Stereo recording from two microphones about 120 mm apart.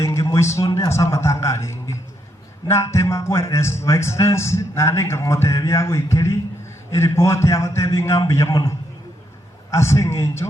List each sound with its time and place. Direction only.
0.0 s a man's voice: 25° left (ahead or behind)
9.7 s a man's voice: 25° left (ahead or behind)